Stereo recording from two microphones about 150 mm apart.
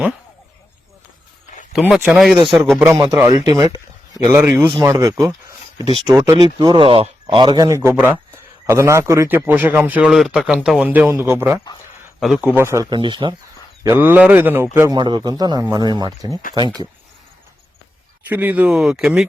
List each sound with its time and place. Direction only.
2.1 s speech: centre (ahead or behind)
2.9 s speech: 25° right (ahead or behind)
4.4 s a man's voice: 15° right (ahead or behind)
12.2 s speech: 5° right (ahead or behind)
12.5 s speech: 20° right (ahead or behind)
13.0 s speech: 35° right (ahead or behind)
13.8 s a man's voice: 15° right (ahead or behind)
14.9 s speech: 30° right (ahead or behind)
18.3 s speech: 10° right (ahead or behind)